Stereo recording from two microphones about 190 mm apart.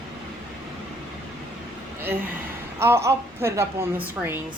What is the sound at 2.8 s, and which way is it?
Speech, 15° right (ahead or behind).